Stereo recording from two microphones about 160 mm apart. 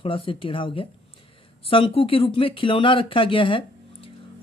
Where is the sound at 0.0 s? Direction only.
35° left (ahead or behind).